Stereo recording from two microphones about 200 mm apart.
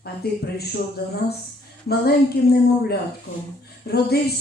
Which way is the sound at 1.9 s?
50° left (ahead or behind).